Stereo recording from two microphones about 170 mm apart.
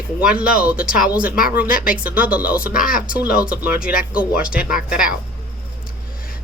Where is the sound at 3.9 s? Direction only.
60° left (ahead or behind).